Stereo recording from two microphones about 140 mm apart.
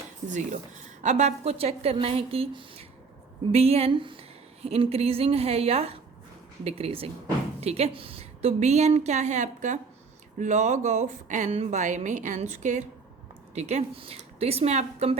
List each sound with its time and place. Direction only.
0.3 s speech: 60° right (ahead or behind)